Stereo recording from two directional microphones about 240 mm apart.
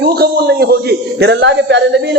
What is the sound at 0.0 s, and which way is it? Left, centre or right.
A man's voice, right.